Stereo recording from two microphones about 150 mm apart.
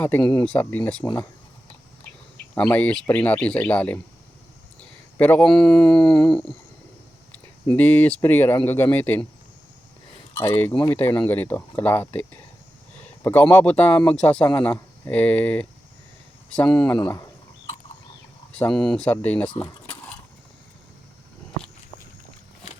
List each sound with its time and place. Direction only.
0.2 s speech: 30° left (ahead or behind)
0.4 s speech: 10° left (ahead or behind)
2.6 s speech: 10° left (ahead or behind)
5.1 s speech: 10° left (ahead or behind)
10.4 s speech: 15° left (ahead or behind)
18.5 s speech: 5° left (ahead or behind)